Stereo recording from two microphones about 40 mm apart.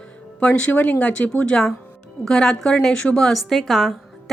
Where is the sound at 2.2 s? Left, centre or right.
Centre.